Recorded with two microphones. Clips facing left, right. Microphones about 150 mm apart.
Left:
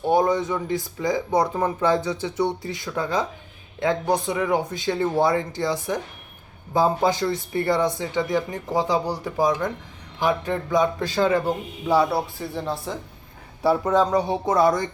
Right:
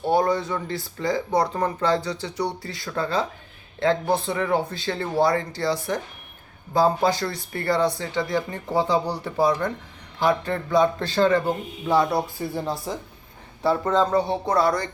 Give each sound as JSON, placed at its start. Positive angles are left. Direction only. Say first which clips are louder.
{"t": 0.0, "sound": "a man's voice", "louder": "left 1 dB", "side_deg": 20}
{"t": 12.6, "sound": "speech", "louder": "even", "side_deg": -5}
{"t": 13.9, "sound": "a man's voice", "louder": "left 1 dB", "side_deg": 15}